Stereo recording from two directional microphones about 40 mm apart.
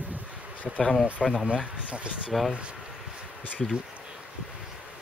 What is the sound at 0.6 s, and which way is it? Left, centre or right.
Speech, centre.